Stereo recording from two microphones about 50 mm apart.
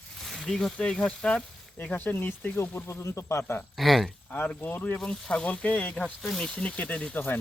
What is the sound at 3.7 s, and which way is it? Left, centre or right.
Speech, centre.